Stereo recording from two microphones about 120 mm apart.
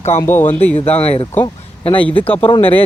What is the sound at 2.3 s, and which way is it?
Speech, 50° left (ahead or behind).